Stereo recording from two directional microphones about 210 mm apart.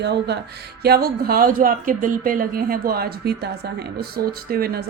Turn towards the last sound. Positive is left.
turn(degrees=-45)  # may be behind; listen again after turning